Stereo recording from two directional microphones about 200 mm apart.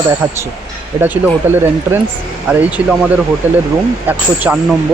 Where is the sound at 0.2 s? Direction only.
10° right (ahead or behind).